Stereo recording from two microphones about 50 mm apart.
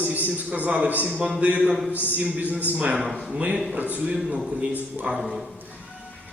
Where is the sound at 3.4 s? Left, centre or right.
Right.